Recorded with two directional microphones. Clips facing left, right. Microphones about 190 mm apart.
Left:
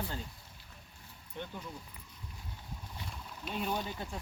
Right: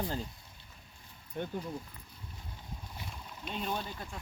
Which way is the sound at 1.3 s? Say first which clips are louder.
Right 6 dB; 45° right (ahead or behind).